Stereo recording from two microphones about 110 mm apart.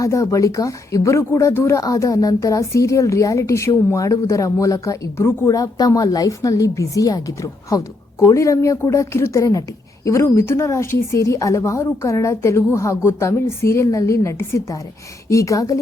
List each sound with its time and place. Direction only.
0.0 s a woman's voice: 25° left (ahead or behind)